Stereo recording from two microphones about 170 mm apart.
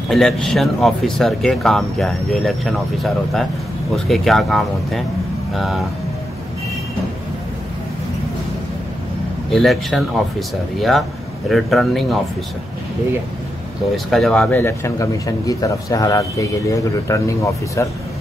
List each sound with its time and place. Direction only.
0.1 s speech: centre (ahead or behind)
9.5 s speech: centre (ahead or behind)
13.9 s speech: centre (ahead or behind); by 17.8 s 20° left (ahead or behind)